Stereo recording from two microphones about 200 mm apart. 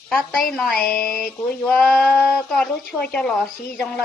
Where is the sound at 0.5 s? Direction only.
5° left (ahead or behind).